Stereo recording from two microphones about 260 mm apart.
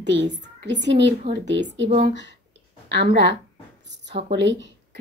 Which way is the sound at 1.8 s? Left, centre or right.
Right.